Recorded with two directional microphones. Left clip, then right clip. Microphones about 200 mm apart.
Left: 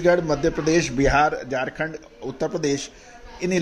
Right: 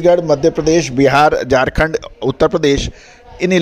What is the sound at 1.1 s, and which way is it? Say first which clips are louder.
A man's voice: right 11 dB; 50° right (ahead or behind).